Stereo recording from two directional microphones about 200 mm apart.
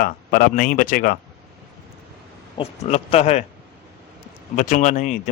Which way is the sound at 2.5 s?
30° left (ahead or behind).